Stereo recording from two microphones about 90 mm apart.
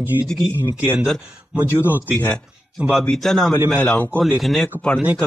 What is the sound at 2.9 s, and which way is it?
Speech, 5° left (ahead or behind).